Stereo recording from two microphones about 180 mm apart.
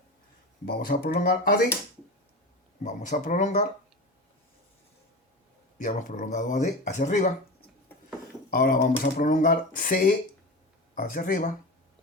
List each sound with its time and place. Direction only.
0.6 s speech: 60° left (ahead or behind)
2.8 s speech: 40° left (ahead or behind)
5.8 s speech: 45° left (ahead or behind)
8.4 s speech: 60° left (ahead or behind)